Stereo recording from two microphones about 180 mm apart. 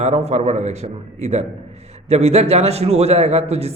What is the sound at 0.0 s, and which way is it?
A man's voice, 35° right (ahead or behind).